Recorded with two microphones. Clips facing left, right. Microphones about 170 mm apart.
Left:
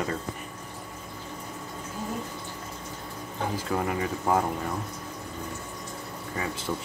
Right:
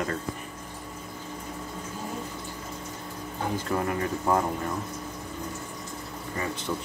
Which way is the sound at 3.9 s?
5° left (ahead or behind).